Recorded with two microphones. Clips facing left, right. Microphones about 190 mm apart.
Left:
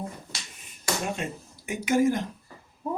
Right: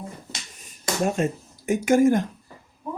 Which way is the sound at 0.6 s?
45° right (ahead or behind).